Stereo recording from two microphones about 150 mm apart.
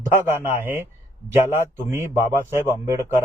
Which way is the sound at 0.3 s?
15° right (ahead or behind).